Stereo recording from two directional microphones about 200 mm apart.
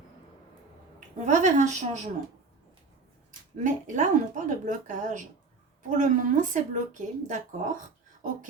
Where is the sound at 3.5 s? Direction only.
40° right (ahead or behind).